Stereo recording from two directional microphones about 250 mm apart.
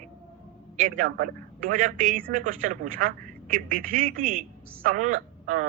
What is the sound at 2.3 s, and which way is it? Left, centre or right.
Speech, right.